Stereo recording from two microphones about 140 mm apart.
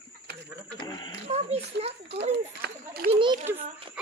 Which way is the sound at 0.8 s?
30° left (ahead or behind).